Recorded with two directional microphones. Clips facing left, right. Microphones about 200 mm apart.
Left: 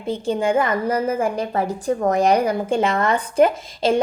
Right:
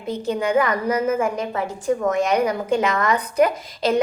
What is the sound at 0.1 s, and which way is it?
A woman's voice, 30° left (ahead or behind).